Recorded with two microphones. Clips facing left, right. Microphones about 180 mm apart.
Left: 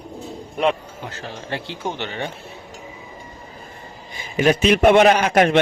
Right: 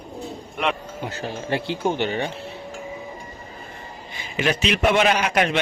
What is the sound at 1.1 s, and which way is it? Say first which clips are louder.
Speech: right 4 dB; 10° right (ahead or behind).